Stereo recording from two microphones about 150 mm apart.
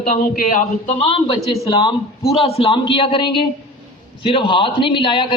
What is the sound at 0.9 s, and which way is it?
A man's voice, 40° left (ahead or behind).